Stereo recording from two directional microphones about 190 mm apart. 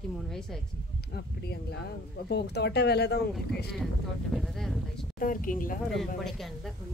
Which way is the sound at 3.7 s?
Centre (ahead or behind).